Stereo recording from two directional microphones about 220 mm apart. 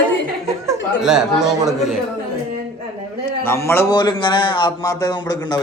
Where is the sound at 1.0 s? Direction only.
Centre (ahead or behind).